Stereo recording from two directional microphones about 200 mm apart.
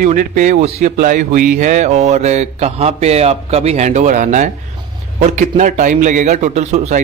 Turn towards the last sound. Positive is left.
turn(degrees=-35)  # may be behind; listen again after turning